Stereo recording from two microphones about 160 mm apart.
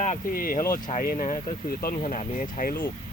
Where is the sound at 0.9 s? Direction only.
50° left (ahead or behind).